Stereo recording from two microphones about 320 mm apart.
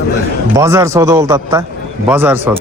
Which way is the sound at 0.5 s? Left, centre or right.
Centre.